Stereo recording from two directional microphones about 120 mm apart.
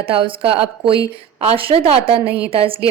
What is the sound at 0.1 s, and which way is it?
A woman's voice, 50° right (ahead or behind).